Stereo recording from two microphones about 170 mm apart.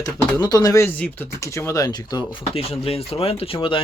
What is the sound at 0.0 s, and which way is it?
Speech, 20° left (ahead or behind).